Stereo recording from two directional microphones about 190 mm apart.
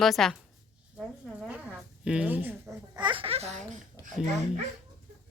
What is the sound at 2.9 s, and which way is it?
Speech, 25° right (ahead or behind).